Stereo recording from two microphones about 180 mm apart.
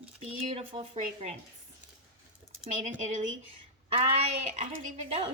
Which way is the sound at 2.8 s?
40° right (ahead or behind).